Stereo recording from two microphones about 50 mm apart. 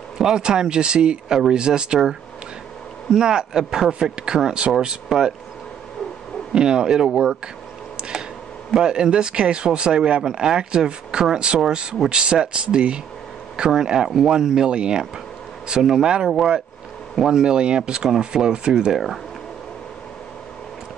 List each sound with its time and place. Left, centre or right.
0.2 s speech: centre
6.5 s speech: centre
8.0 s a sound: centre
8.7 s speech: centre
17.3 s speech: centre